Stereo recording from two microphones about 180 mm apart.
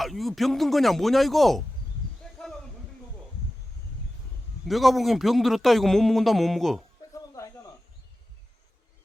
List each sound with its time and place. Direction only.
0.0 s a man's voice: centre (ahead or behind)
4.6 s a man's voice: centre (ahead or behind)
7.1 s a sound: 15° left (ahead or behind)